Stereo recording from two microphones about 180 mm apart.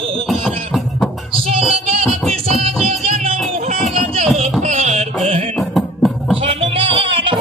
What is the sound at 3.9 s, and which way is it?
Music, 35° right (ahead or behind).